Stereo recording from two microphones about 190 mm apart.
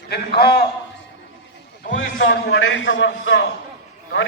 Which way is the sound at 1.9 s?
75° left (ahead or behind).